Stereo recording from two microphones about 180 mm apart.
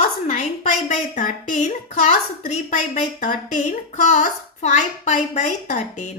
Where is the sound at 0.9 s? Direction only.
50° left (ahead or behind).